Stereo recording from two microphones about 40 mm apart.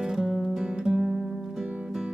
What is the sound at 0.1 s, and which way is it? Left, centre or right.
Music, centre.